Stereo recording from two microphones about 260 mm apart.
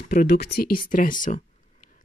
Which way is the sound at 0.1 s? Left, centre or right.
Left.